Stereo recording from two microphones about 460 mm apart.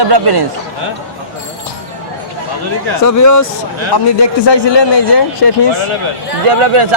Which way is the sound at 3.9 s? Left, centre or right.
Left.